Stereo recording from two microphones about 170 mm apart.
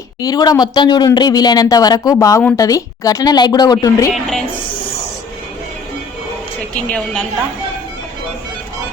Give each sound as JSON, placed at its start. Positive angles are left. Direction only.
{"t": 0.2, "sound": "speech", "side_deg": 20}
{"t": 4.1, "sound": "a woman's voice", "side_deg": 0}